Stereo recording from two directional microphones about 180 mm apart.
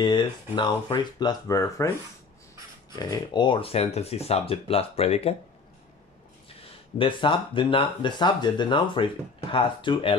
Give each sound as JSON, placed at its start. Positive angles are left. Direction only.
{"t": 0.0, "sound": "speech", "side_deg": 25}
{"t": 3.0, "sound": "speech", "side_deg": 25}
{"t": 7.0, "sound": "speech", "side_deg": 25}